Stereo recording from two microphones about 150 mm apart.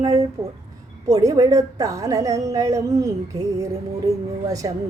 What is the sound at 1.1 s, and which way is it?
A woman's voice, 25° right (ahead or behind).